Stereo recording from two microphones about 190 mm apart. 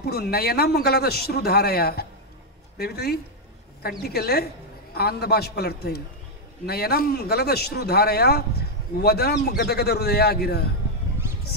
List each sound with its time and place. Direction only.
0.0 s a man's voice: 55° left (ahead or behind)